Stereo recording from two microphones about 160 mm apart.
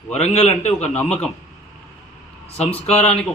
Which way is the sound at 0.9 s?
5° left (ahead or behind).